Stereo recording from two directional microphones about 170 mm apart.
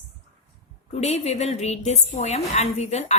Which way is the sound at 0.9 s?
40° left (ahead or behind).